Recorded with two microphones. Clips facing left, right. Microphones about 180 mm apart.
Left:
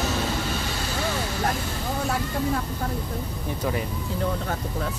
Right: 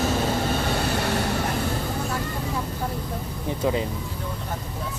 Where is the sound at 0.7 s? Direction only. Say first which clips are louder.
Right 4 dB; 60° right (ahead or behind).